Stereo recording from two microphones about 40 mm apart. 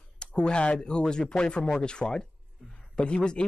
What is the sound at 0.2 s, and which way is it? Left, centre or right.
Speech, left.